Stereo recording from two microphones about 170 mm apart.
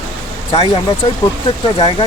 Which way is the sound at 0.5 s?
35° left (ahead or behind).